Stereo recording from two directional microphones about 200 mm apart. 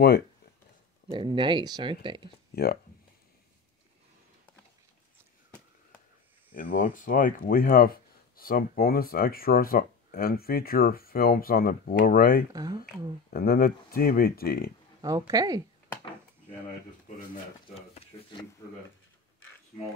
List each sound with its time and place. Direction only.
1.0 s speech: 25° right (ahead or behind)
2.5 s speech: 50° left (ahead or behind)
6.5 s speech: 45° left (ahead or behind)
15.0 s speech: 20° right (ahead or behind)
17.7 s speech: 30° left (ahead or behind)